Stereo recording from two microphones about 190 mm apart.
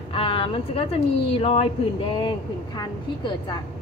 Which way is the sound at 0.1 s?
30° left (ahead or behind).